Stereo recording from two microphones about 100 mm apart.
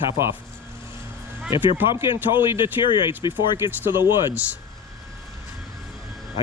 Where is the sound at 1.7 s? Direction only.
25° right (ahead or behind).